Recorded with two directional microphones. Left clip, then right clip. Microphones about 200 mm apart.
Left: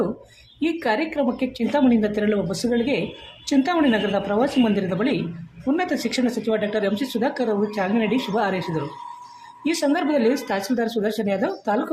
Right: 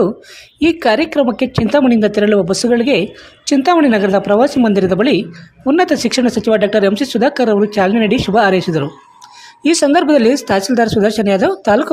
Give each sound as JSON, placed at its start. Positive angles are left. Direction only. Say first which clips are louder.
{"t": 0.6, "sound": "speech", "louder": "right 10 dB", "side_deg": -40}